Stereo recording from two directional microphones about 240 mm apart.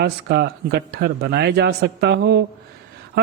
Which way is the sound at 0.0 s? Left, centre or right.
Right.